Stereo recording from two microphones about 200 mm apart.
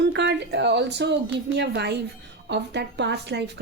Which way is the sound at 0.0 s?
60° right (ahead or behind).